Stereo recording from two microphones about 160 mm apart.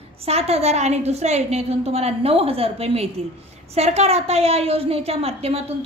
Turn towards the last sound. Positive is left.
turn(degrees=-40)  # may be behind; listen again after turning